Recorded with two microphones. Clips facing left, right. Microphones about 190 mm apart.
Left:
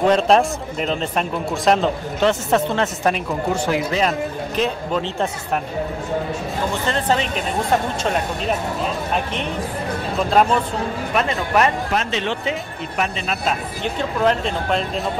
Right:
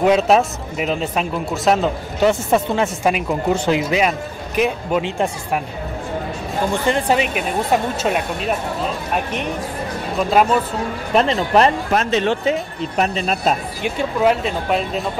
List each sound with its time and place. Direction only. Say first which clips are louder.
0.0 s speech: right 1 dB; 5° right (ahead or behind)
3.6 s speech: right 1 dB; 20° right (ahead or behind)
6.7 s speech: right 3 dB; 15° right (ahead or behind)
10.1 s speech: right 1 dB; 5° right (ahead or behind)
11.1 s speech: right 5 dB; 30° right (ahead or behind)
11.9 s speech: right 5 dB; 45° right (ahead or behind)
13.8 s speech: right 2 dB; 10° right (ahead or behind)